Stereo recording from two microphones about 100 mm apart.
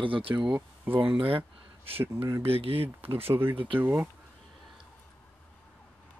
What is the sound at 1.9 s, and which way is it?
Speech, 20° right (ahead or behind).